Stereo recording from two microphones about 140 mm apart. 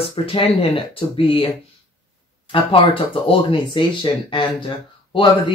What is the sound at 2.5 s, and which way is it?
Speech, 40° left (ahead or behind).